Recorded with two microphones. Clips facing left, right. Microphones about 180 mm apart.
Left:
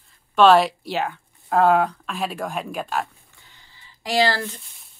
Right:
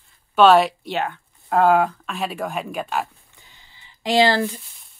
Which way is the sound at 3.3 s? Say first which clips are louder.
Right 1 dB; 20° right (ahead or behind).